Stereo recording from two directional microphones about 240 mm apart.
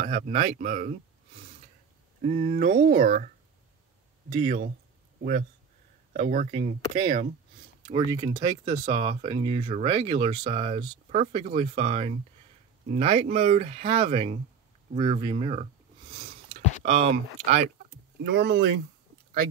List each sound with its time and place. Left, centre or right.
0.0 s speech: right
2.2 s speech: right
4.4 s speech: right
6.1 s speech: right
15.0 s a sound: right
16.8 s speech: right
18.2 s speech: right